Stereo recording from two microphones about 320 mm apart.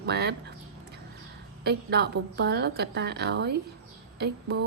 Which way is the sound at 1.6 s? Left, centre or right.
Right.